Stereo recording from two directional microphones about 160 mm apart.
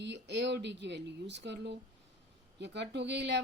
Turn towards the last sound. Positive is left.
turn(degrees=-90)